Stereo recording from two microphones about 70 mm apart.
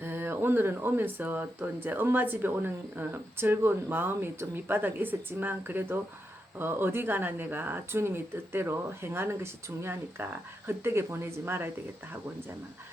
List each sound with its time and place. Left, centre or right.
0.0 s speech: right